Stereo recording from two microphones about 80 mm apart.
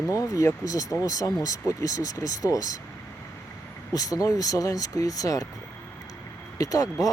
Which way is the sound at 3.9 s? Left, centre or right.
Left.